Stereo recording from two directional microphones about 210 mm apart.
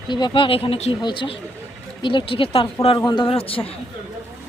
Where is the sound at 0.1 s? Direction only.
20° left (ahead or behind).